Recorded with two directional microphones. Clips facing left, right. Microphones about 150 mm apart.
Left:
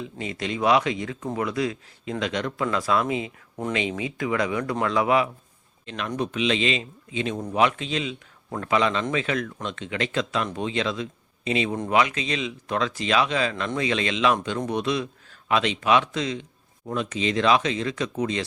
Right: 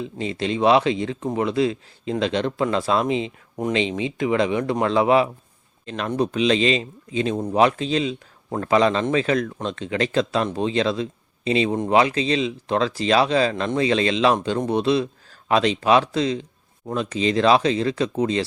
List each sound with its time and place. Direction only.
0.2 s speech: 30° right (ahead or behind)